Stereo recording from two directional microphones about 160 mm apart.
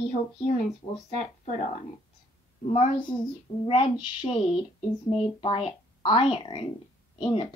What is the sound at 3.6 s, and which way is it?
Speech, 30° left (ahead or behind).